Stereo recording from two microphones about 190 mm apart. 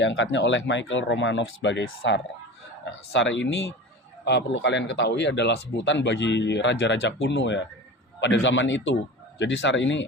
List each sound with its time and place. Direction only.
0.0 s speech: 75° left (ahead or behind)